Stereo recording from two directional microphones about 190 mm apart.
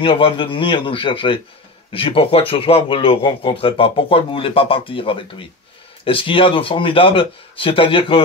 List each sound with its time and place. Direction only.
0.0 s a man's voice: 30° left (ahead or behind)